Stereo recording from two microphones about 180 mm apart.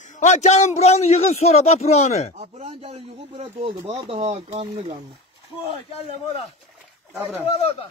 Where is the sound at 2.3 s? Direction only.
35° right (ahead or behind).